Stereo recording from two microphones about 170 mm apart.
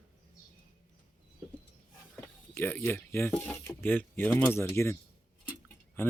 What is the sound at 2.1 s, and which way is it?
Speech, 10° left (ahead or behind).